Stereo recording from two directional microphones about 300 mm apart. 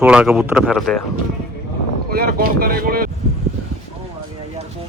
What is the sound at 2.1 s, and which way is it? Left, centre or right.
Speech, right.